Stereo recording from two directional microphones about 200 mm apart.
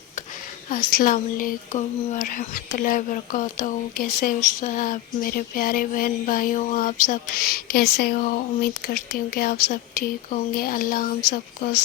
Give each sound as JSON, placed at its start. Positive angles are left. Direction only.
{"t": 0.7, "sound": "speech", "side_deg": 45}